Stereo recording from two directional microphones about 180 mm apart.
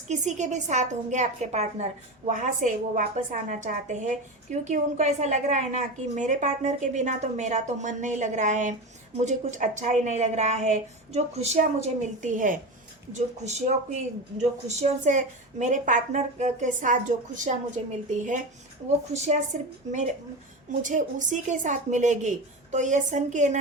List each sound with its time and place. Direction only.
0.1 s a woman's voice: 40° right (ahead or behind)
19.1 s speech: 40° right (ahead or behind)
20.8 s a woman's voice: 45° right (ahead or behind)